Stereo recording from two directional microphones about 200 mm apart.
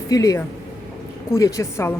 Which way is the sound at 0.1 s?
20° left (ahead or behind).